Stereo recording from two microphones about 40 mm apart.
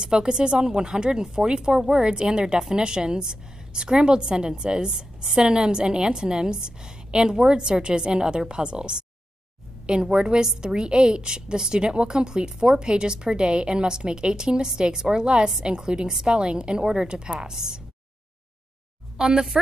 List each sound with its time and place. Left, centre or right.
0.0 s a woman's voice: right
10.0 s a woman's voice: right
19.1 s a woman's voice: centre